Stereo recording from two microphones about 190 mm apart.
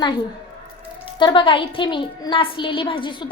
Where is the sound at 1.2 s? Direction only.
25° left (ahead or behind).